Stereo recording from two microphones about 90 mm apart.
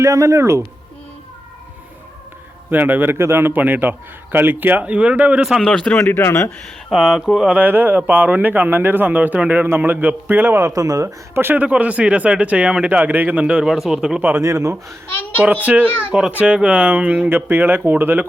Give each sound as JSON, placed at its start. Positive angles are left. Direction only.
{"t": 0.0, "sound": "speech", "side_deg": -35}
{"t": 2.6, "sound": "a man's voice", "side_deg": -20}
{"t": 5.5, "sound": "speech", "side_deg": 5}
{"t": 6.0, "sound": "speech", "side_deg": 20}
{"t": 6.9, "sound": "speech", "side_deg": -5}
{"t": 7.6, "sound": "a man's voice", "side_deg": -20}
{"t": 10.7, "sound": "speech", "side_deg": -40}
{"t": 11.3, "sound": "speech", "side_deg": -20}
{"t": 14.2, "sound": "a man's voice", "side_deg": -20}
{"t": 14.4, "sound": "speech", "side_deg": -35}
{"t": 15.6, "sound": "speech", "side_deg": -15}
{"t": 15.9, "sound": "speech", "side_deg": 25}
{"t": 16.3, "sound": "a man's voice", "side_deg": -10}